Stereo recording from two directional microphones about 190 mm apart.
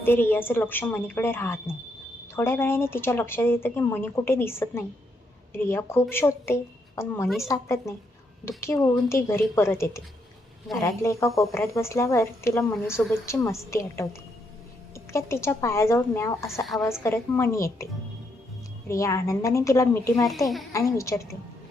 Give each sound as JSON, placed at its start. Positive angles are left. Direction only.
{"t": 0.0, "sound": "a woman's voice", "side_deg": 10}
{"t": 18.9, "sound": "a woman's voice", "side_deg": 15}